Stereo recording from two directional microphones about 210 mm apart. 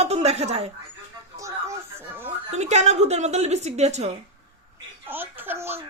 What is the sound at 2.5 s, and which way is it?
A woman's voice, 30° right (ahead or behind).